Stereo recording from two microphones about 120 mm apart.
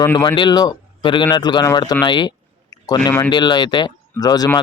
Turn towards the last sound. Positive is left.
turn(degrees=35)  # may be behind; listen again after turning